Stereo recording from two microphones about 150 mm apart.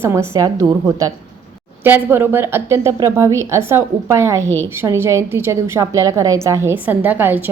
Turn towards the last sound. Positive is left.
turn(degrees=-15)  # may be behind; listen again after turning